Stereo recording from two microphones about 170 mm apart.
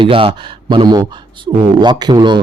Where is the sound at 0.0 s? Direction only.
30° right (ahead or behind).